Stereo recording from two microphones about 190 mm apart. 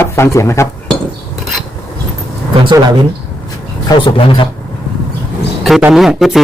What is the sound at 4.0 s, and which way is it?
Speech, 25° left (ahead or behind).